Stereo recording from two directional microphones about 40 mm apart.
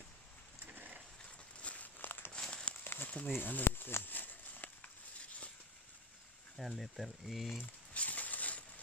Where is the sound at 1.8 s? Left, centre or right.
Left.